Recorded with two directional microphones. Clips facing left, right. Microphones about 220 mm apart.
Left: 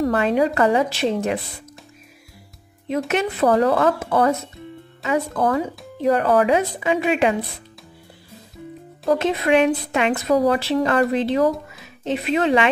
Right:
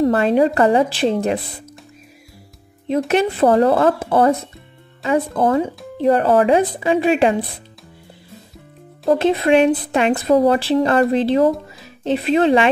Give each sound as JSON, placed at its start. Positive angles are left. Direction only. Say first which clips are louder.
{"t": 0.0, "sound": "a woman's voice", "louder": "right 4 dB", "side_deg": -30}
{"t": 3.1, "sound": "a woman's voice", "louder": "right 4 dB", "side_deg": -30}
{"t": 9.2, "sound": "a woman's voice", "louder": "right 4 dB", "side_deg": -30}